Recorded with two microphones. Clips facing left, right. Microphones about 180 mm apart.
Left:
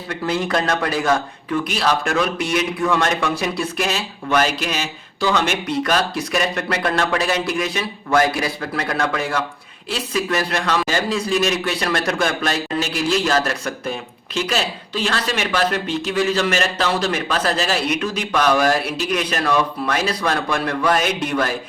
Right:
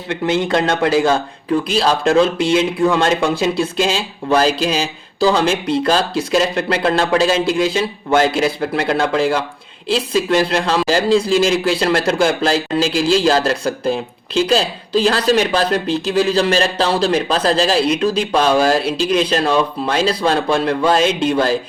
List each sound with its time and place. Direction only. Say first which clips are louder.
0.3 s speech: right 4 dB; 25° right (ahead or behind)